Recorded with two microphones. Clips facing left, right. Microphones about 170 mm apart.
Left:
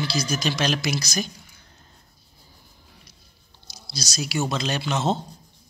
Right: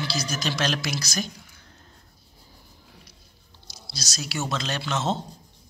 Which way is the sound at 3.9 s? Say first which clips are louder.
Left 5 dB; centre (ahead or behind).